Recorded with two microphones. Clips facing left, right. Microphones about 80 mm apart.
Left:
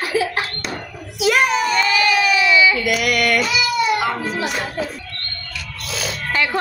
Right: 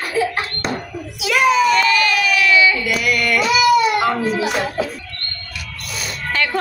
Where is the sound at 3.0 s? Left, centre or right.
Left.